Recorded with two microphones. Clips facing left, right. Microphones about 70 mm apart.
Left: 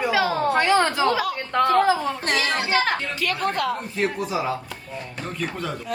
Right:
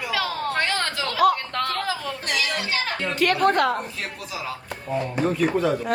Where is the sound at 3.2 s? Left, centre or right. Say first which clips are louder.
Right 5 dB; right.